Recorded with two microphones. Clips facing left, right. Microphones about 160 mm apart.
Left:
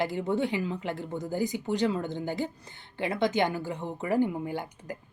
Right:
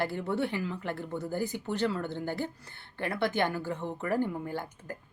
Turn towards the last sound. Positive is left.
turn(degrees=15)  # may be behind; listen again after turning